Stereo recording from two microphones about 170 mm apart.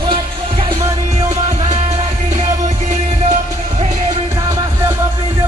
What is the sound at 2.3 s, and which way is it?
Music, 20° right (ahead or behind).